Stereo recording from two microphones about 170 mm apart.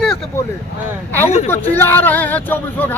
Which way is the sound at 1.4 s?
10° left (ahead or behind).